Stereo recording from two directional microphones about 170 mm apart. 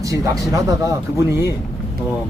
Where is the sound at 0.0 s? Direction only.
20° right (ahead or behind).